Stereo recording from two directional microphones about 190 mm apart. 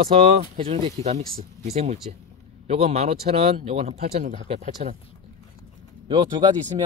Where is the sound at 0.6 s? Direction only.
30° right (ahead or behind).